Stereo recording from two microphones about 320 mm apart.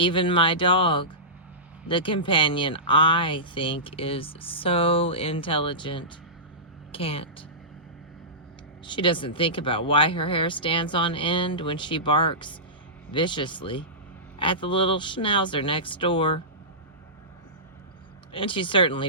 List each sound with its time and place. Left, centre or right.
0.0 s speech: centre
8.9 s speech: centre
18.3 s speech: centre